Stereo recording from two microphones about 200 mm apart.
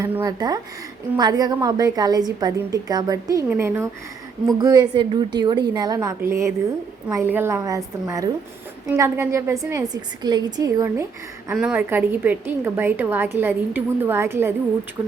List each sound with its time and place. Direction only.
0.0 s a woman's voice: 15° right (ahead or behind)